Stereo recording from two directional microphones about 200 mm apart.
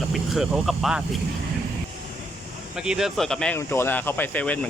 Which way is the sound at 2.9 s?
Centre (ahead or behind).